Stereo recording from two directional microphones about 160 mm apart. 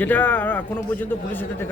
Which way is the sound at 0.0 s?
10° left (ahead or behind).